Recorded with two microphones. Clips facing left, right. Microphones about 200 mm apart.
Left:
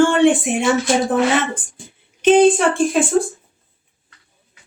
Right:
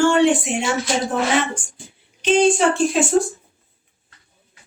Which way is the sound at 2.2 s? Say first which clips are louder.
Left 4 dB; 55° left (ahead or behind).